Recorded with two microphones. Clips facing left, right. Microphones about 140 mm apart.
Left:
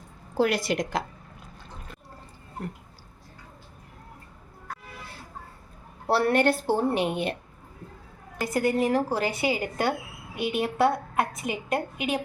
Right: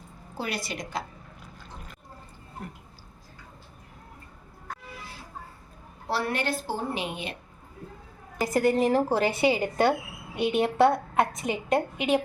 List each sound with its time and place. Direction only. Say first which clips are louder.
0.3 s a woman's voice: left 9 dB; 90° left
6.1 s a woman's voice: left 7 dB; 60° left (ahead or behind)
8.4 s a woman's voice: right 2 dB; centre (ahead or behind)